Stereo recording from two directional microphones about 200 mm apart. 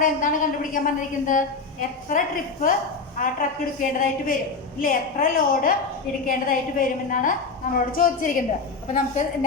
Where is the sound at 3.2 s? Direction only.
45° left (ahead or behind).